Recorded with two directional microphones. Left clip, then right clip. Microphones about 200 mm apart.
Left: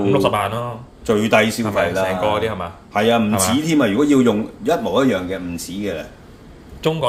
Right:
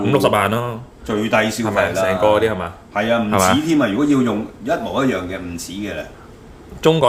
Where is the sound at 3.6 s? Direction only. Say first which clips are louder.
Even; 30° left (ahead or behind).